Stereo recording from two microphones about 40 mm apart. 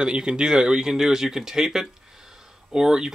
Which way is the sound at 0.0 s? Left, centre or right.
Right.